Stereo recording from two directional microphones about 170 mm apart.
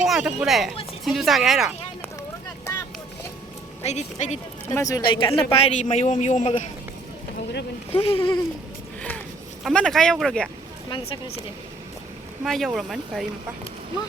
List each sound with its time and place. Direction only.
0.0 s speech: 5° right (ahead or behind)
3.8 s a man's voice: 40° left (ahead or behind)
4.7 s a man's voice: 20° left (ahead or behind); by 6.7 s 40° left (ahead or behind)
7.9 s a man's voice: 35° left (ahead or behind)
9.0 s a sound: 10° left (ahead or behind)
9.6 s speech: 5° left (ahead or behind)
10.8 s a woman's voice: 30° left (ahead or behind)
12.5 s speech: centre (ahead or behind)